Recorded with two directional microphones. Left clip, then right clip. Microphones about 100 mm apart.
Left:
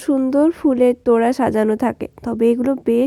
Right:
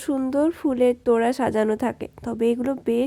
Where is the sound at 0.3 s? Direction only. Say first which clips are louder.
Left 6 dB; 30° left (ahead or behind).